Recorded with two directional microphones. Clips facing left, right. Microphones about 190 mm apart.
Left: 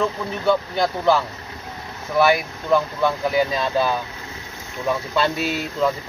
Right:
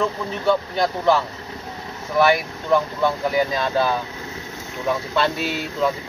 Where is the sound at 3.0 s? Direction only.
15° right (ahead or behind).